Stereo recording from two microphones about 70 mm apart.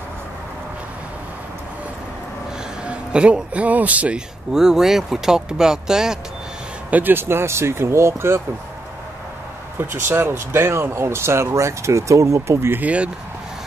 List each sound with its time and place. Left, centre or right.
2.8 s a man's voice: centre
4.6 s speech: centre
6.9 s speech: right
9.8 s speech: right
12.8 s speech: centre